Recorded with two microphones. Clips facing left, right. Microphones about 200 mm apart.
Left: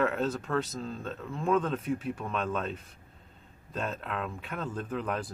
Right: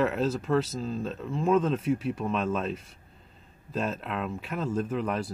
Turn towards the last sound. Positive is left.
turn(degrees=0)  # may be behind; listen again after turning